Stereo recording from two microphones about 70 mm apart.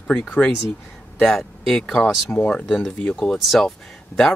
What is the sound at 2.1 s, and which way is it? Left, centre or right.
Speech, left.